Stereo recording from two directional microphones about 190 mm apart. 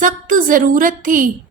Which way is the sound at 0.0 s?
45° right (ahead or behind).